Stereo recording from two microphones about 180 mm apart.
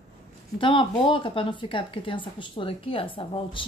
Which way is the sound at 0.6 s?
30° left (ahead or behind).